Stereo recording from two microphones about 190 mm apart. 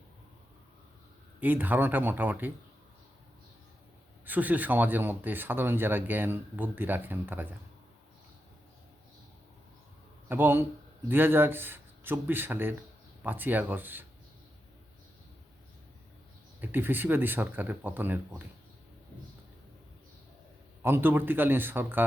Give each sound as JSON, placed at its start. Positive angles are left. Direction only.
{"t": 1.4, "sound": "speech", "side_deg": -10}
{"t": 4.3, "sound": "speech", "side_deg": -10}
{"t": 10.2, "sound": "speech", "side_deg": -10}
{"t": 16.6, "sound": "speech", "side_deg": -10}
{"t": 20.8, "sound": "speech", "side_deg": -10}